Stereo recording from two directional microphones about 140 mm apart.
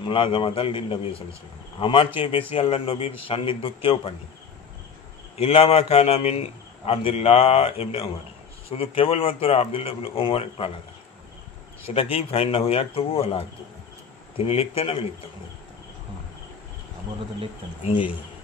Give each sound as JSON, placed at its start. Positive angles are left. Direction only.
{"t": 0.0, "sound": "a man's voice", "side_deg": 40}
{"t": 5.4, "sound": "a man's voice", "side_deg": 45}
{"t": 11.8, "sound": "a man's voice", "side_deg": 45}